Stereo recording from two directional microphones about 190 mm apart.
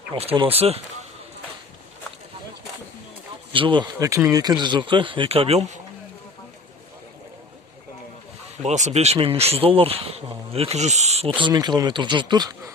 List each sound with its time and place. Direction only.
0.1 s speech: 30° right (ahead or behind)
3.5 s speech: 25° right (ahead or behind)
8.6 s speech: 35° right (ahead or behind)
11.3 s speech: 25° right (ahead or behind)